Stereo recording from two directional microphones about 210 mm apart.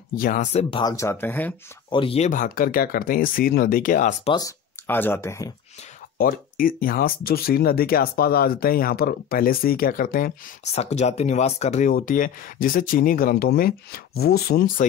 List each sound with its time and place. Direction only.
0.1 s speech: 40° left (ahead or behind); by 1.5 s 10° left (ahead or behind)
1.9 s speech: 25° left (ahead or behind)
4.3 s speech: 15° left (ahead or behind)
6.1 s speech: 40° left (ahead or behind)